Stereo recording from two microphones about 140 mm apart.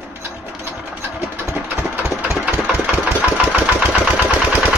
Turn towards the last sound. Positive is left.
turn(degrees=-10)  # may be behind; listen again after turning